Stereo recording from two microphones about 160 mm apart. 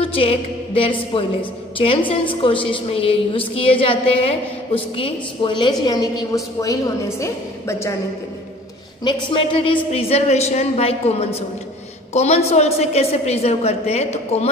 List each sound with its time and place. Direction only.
0.0 s a woman's voice: 35° left (ahead or behind); by 7.9 s 20° left (ahead or behind)
9.0 s a woman's voice: 30° left (ahead or behind)